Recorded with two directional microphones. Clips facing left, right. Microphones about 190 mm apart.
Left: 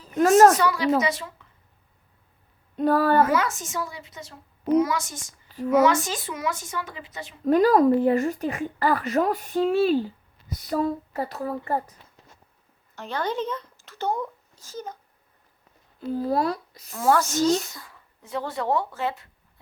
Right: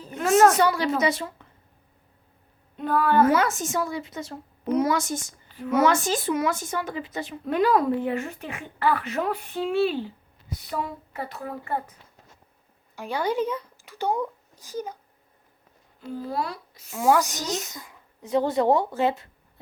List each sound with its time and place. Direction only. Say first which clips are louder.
0.2 s a woman's voice: left 3 dB; 45° left (ahead or behind)
0.6 s a woman's voice: even; 30° right (ahead or behind)
2.7 s speech: left 3 dB; 40° left (ahead or behind)
3.4 s speech: right 4 dB; 55° right (ahead or behind)
5.7 s speech: left 1 dB; 55° right (ahead or behind)
7.4 s speech: left 4 dB; 40° left (ahead or behind)
13.0 s speech: right 2 dB; 10° right (ahead or behind)
16.0 s speech: left 6 dB; 40° left (ahead or behind)
16.9 s speech: even; 15° right (ahead or behind)